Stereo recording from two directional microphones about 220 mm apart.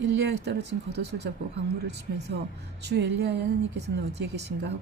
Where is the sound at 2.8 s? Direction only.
50° right (ahead or behind).